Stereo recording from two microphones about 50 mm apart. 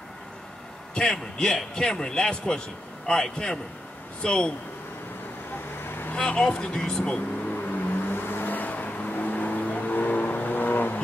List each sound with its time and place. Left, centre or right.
0.9 s speech: centre
5.9 s vehicle: left
6.1 s speech: centre
7.6 s vehicle: left